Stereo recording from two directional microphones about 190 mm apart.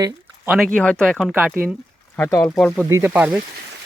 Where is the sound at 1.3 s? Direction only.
10° right (ahead or behind).